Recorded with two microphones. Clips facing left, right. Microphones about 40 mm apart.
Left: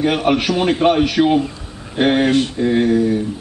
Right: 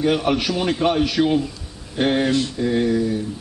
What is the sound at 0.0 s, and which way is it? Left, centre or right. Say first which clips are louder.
A man's voice: left 3 dB; left.